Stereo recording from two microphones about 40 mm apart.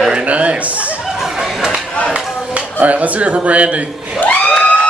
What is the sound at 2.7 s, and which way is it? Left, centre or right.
A man's voice, right.